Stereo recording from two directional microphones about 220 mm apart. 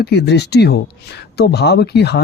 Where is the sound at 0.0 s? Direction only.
50° left (ahead or behind).